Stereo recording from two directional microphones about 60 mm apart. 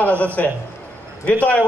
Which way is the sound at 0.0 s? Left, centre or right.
Left.